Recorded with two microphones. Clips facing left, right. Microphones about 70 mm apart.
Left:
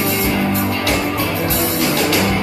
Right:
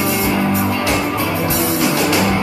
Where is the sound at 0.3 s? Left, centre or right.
Centre.